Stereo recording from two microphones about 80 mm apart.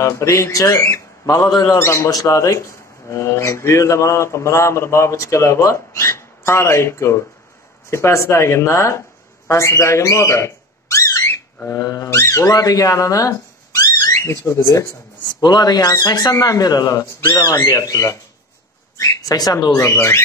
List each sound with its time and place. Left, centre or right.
0.0 s a man's voice: left
1.3 s speech: left
1.8 s a man's voice: left
11.2 s a sound: left
12.1 s speech: left
12.4 s a sound: left
14.2 s a man's voice: left
15.4 s speech: left
16.3 s speech: left
17.6 s speech: left
19.7 s a man's voice: left